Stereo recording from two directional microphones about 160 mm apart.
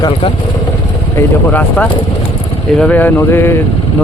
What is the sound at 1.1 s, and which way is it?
Speech, 10° left (ahead or behind).